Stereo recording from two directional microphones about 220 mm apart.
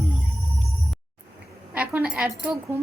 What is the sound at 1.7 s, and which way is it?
Speech, 5° right (ahead or behind).